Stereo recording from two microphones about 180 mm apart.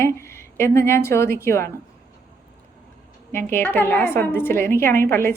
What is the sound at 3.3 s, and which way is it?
A woman's voice, 15° left (ahead or behind).